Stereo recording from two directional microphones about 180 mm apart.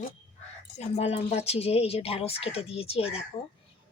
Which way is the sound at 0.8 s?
35° left (ahead or behind).